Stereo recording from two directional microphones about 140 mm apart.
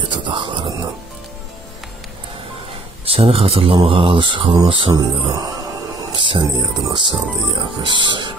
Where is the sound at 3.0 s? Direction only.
45° right (ahead or behind).